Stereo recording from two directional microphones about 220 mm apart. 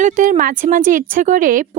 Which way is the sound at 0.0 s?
35° right (ahead or behind).